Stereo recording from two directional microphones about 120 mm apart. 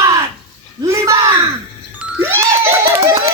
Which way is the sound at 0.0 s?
30° right (ahead or behind).